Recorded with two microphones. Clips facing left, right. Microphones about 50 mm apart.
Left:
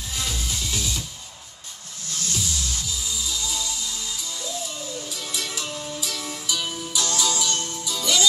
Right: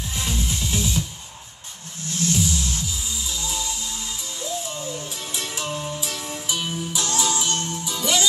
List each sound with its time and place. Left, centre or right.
0.1 s music: right
2.0 s music: right
5.1 s music: right